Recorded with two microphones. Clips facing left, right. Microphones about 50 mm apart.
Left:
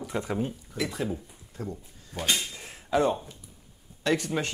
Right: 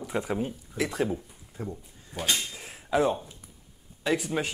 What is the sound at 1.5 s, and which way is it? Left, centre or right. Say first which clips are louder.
Speech: even; right.